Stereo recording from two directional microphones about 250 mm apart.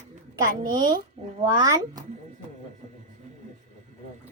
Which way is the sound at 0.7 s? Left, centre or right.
Centre.